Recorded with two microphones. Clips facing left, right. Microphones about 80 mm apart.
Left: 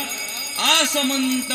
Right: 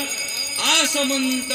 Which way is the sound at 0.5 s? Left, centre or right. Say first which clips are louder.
Left 2 dB; left.